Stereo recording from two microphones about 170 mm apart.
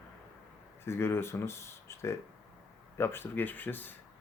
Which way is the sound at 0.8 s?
15° left (ahead or behind).